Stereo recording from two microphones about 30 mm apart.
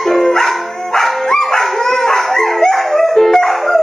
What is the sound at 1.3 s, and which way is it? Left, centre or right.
Dog, centre.